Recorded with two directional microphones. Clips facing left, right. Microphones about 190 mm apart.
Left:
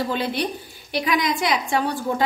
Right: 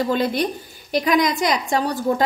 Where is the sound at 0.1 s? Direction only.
45° right (ahead or behind).